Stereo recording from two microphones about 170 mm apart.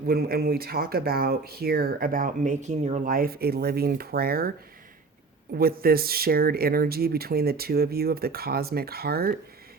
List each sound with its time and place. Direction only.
0.0 s speech: 65° right (ahead or behind)
5.5 s speech: 60° right (ahead or behind)